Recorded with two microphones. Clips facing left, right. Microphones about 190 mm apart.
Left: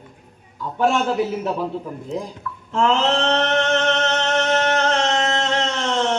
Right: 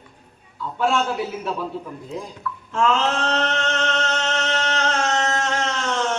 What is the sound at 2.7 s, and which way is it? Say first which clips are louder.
Speech: left 2 dB; 30° left (ahead or behind).